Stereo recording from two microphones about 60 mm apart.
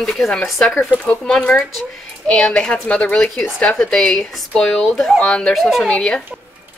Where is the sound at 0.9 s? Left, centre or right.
Centre.